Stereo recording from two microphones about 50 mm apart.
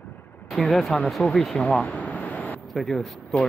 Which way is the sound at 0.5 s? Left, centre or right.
Centre.